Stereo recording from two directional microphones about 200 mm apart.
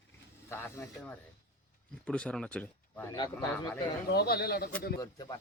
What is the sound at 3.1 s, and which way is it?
Speech, 20° left (ahead or behind).